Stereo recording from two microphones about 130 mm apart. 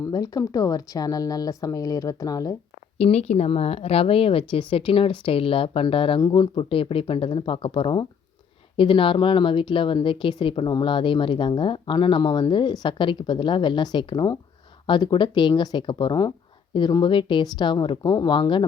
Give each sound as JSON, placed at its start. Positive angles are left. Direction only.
{"t": 0.0, "sound": "speech", "side_deg": 30}
{"t": 3.0, "sound": "speech", "side_deg": 55}